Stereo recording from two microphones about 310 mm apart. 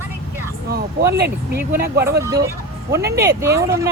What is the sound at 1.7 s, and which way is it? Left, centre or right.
Speech, right.